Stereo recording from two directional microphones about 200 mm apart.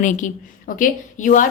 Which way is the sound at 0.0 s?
40° left (ahead or behind).